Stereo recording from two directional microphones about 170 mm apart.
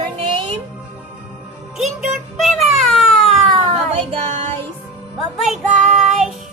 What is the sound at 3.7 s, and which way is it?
Child singing, 35° right (ahead or behind).